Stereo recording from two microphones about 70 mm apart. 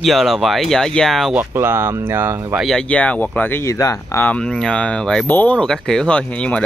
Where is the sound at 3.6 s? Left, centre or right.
Left.